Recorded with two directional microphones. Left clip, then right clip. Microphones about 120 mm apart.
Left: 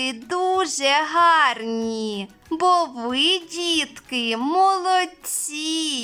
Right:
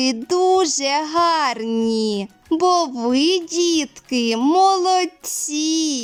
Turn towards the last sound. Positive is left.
turn(degrees=-35)  # may be behind; listen again after turning